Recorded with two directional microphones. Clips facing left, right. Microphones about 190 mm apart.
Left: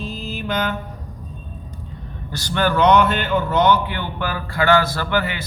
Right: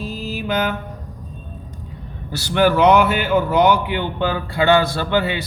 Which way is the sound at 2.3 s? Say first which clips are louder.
Right 4 dB; 10° right (ahead or behind).